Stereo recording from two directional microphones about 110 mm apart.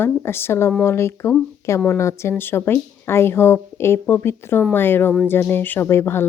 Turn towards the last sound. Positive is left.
turn(degrees=25)  # may be behind; listen again after turning